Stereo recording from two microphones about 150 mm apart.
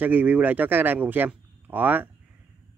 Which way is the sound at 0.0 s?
10° right (ahead or behind).